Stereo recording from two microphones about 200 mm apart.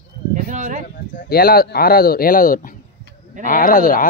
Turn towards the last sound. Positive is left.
turn(degrees=45)  # may be behind; listen again after turning